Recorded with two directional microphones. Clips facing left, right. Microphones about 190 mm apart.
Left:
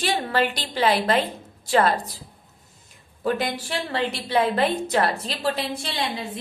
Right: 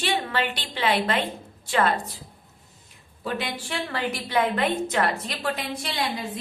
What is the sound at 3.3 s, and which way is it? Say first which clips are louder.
Speech: left 3 dB; 45° left (ahead or behind).